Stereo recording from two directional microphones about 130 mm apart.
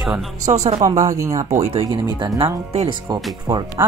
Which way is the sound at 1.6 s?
50° right (ahead or behind).